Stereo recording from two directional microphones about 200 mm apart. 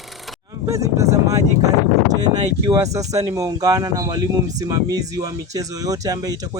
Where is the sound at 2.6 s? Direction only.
15° right (ahead or behind).